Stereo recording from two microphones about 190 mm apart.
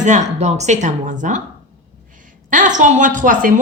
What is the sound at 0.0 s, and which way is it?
Speech, 40° right (ahead or behind).